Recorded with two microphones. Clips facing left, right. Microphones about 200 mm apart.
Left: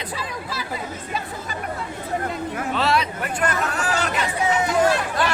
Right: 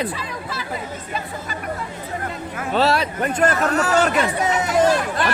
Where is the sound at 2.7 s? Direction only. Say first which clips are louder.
Right 4 dB; 40° right (ahead or behind).